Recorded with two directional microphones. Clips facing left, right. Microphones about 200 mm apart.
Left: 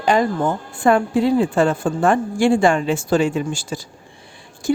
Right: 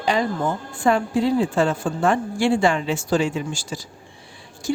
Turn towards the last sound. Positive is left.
turn(degrees=55)  # may be behind; listen again after turning